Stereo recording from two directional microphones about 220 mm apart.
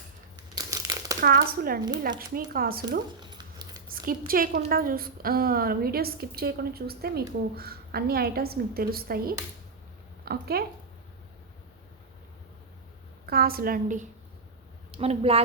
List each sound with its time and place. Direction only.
0.5 s crumpling: 15° right (ahead or behind)
1.2 s a woman's voice: 45° right (ahead or behind)
3.2 s a sound: 20° right (ahead or behind)
3.8 s a woman's voice: 40° right (ahead or behind)
10.2 s a sound: 45° right (ahead or behind)
13.2 s a woman's voice: 45° right (ahead or behind); by 15.4 s 25° right (ahead or behind)